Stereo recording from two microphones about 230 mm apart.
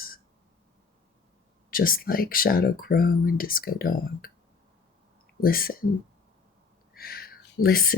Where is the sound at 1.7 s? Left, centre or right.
Left.